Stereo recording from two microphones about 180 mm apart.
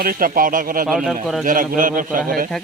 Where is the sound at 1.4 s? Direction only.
50° right (ahead or behind).